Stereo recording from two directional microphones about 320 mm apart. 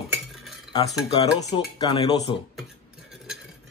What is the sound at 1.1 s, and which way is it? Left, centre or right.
Speech, centre.